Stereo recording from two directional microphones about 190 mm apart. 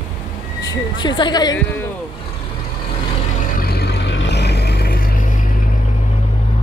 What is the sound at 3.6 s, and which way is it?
Vehicle, 60° left (ahead or behind).